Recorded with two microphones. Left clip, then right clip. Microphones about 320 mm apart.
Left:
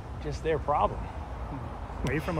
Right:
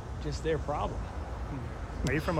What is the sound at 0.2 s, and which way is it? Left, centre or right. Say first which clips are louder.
Speech: left 2 dB; centre.